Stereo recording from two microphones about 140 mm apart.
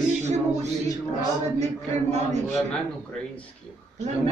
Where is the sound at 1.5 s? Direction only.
55° right (ahead or behind).